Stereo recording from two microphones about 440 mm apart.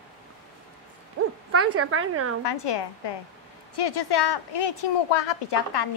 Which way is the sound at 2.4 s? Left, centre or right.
Left.